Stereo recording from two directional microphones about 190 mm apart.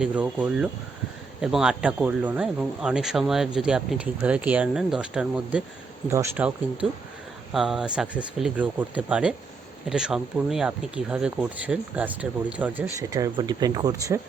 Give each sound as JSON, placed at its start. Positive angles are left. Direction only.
{"t": 0.0, "sound": "speech", "side_deg": -5}
{"t": 7.5, "sound": "speech", "side_deg": 0}